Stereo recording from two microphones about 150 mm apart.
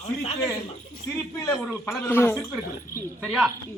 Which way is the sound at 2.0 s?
15° left (ahead or behind).